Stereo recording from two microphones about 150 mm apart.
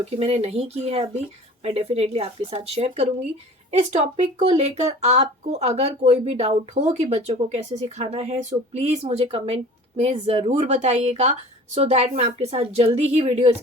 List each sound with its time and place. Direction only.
0.2 s speech: 45° right (ahead or behind)